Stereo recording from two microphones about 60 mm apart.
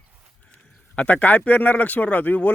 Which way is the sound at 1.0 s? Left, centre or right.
Left.